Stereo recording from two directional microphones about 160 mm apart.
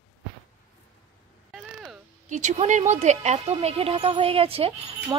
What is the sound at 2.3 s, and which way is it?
Speech, 50° right (ahead or behind).